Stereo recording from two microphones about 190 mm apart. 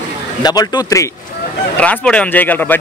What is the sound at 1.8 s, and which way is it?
Speech, 5° left (ahead or behind).